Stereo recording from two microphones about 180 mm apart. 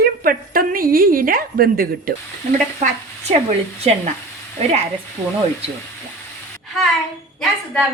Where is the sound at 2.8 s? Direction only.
40° right (ahead or behind).